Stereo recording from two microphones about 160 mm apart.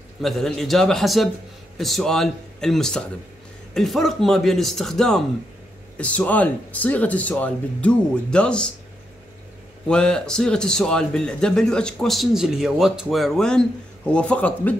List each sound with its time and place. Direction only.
0.2 s speech: centre (ahead or behind)
9.8 s speech: 5° left (ahead or behind)